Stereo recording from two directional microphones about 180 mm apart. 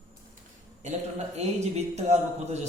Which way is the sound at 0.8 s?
40° right (ahead or behind).